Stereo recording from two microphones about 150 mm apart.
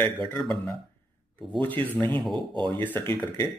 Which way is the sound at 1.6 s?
10° left (ahead or behind).